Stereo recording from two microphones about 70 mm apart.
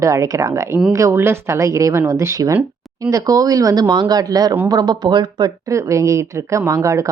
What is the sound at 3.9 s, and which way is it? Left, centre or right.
Speech, right.